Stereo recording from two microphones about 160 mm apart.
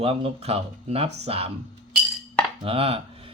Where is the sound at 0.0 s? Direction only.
35° right (ahead or behind).